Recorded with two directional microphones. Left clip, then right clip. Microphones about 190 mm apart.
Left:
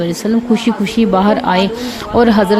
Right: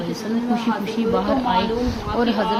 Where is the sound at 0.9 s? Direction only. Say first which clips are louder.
Left 9 dB; 50° left (ahead or behind).